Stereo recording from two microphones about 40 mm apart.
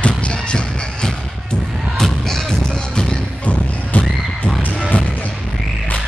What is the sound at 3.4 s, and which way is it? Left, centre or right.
Neigh, left.